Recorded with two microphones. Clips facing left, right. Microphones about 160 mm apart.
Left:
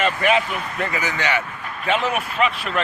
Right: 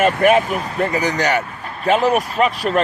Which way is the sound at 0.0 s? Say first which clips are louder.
Right 6 dB; 50° right (ahead or behind).